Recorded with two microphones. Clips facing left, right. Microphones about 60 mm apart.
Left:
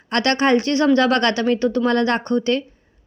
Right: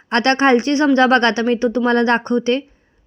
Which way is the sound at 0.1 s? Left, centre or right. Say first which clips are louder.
Right 3 dB; right.